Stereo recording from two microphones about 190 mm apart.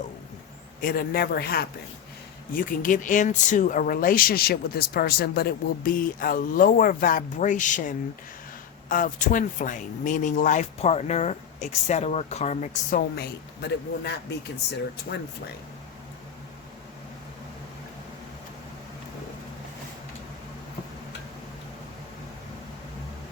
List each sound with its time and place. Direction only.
0.8 s speech: 50° left (ahead or behind)
13.1 s speech: 60° left (ahead or behind)